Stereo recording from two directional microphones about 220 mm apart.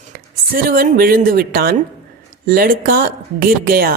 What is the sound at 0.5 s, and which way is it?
Speech, 40° right (ahead or behind).